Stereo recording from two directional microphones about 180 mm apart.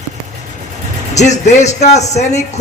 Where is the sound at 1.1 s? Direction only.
40° left (ahead or behind).